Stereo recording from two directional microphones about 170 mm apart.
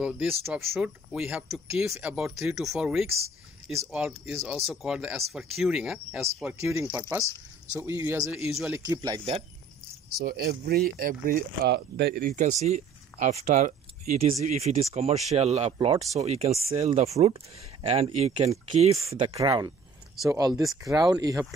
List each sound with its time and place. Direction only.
0.0 s speech: 5° right (ahead or behind)
6.2 s speech: 15° right (ahead or behind)
10.1 s speech: 65° right (ahead or behind); by 19.3 s 35° right (ahead or behind)
19.3 s speech: 20° right (ahead or behind)